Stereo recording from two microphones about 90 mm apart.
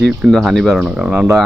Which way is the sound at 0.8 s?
10° right (ahead or behind).